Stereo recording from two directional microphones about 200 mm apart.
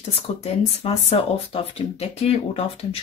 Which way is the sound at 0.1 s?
30° left (ahead or behind).